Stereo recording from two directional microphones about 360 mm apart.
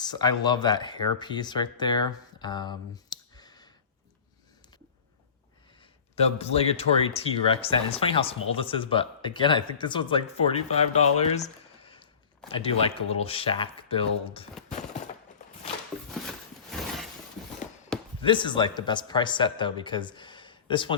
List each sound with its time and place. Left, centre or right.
0.0 s speech: centre
6.1 s speech: centre
16.1 s a sound: centre
18.2 s speech: centre